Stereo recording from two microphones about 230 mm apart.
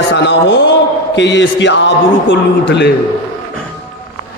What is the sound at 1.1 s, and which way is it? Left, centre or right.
A man's voice, left.